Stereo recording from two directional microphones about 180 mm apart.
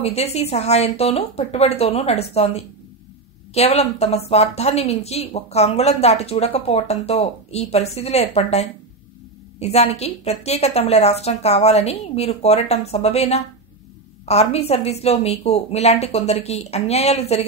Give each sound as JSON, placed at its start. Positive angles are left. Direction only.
{"t": 0.0, "sound": "speech", "side_deg": 35}